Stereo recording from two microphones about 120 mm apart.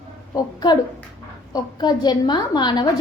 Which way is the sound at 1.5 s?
35° left (ahead or behind).